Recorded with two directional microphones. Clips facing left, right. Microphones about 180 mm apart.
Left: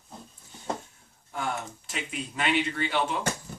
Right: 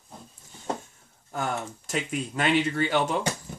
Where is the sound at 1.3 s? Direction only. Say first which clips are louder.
Right 2 dB; 45° right (ahead or behind).